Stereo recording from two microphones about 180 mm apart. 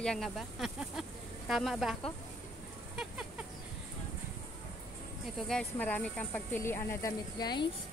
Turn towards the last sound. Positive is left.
turn(degrees=25)  # may be behind; listen again after turning